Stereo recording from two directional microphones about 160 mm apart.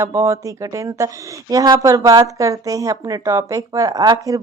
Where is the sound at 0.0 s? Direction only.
20° right (ahead or behind).